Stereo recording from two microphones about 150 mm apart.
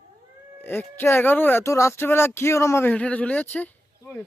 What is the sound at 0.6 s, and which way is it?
Speech, 15° left (ahead or behind).